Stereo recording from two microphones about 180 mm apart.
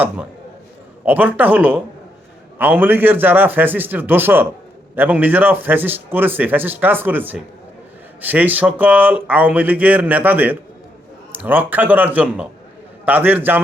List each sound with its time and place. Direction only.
1.0 s a man's voice: 10° right (ahead or behind)